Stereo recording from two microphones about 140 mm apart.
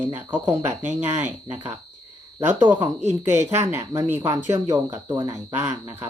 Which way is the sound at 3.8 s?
30° right (ahead or behind).